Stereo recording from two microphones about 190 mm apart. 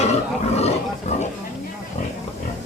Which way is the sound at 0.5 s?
35° left (ahead or behind).